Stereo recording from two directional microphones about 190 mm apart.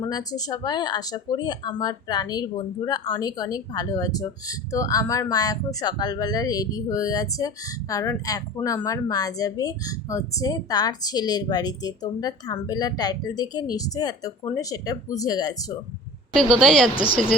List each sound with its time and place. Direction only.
0.0 s speech: 20° left (ahead or behind)
16.3 s speech: 5° left (ahead or behind)